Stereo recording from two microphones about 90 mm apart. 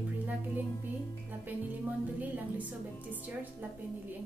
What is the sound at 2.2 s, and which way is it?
A woman's voice, 20° right (ahead or behind).